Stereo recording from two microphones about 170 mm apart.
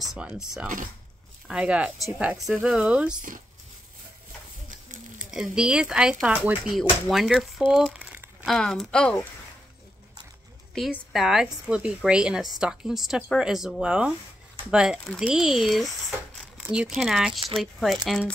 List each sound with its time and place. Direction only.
0.0 s a woman's voice: 5° right (ahead or behind)
3.2 s speech: 50° right (ahead or behind)
5.2 s a woman's voice: 5° right (ahead or behind)
10.7 s a woman's voice: centre (ahead or behind)
17.3 s speech: 30° right (ahead or behind)
17.6 s a woman's voice: centre (ahead or behind)